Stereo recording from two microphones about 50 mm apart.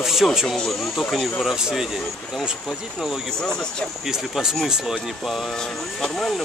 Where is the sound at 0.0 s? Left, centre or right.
Centre.